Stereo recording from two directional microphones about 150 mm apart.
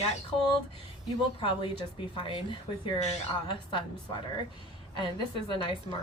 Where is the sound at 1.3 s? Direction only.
35° left (ahead or behind).